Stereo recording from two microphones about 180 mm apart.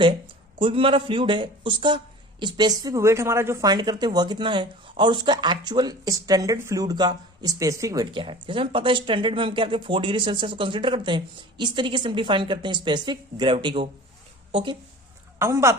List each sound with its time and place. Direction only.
0.0 s a man's voice: 30° right (ahead or behind)
15.4 s speech: 15° right (ahead or behind)